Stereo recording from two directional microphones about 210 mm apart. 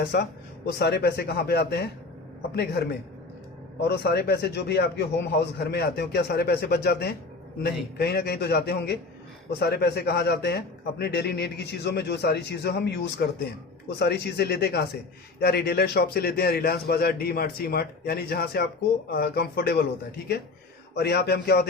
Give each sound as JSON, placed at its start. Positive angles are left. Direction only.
{"t": 0.0, "sound": "a man's voice", "side_deg": 50}
{"t": 3.8, "sound": "a man's voice", "side_deg": 50}